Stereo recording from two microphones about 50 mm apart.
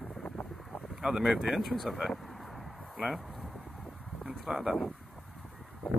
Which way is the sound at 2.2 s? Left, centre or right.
Centre.